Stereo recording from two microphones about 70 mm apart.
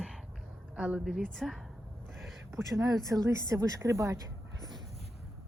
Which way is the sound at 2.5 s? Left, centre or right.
Right.